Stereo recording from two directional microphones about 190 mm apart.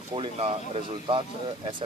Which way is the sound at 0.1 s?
30° right (ahead or behind).